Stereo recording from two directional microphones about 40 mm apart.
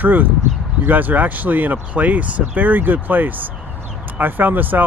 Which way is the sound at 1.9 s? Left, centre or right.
Right.